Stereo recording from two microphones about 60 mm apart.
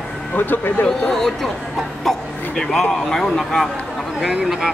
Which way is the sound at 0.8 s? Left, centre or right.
Centre.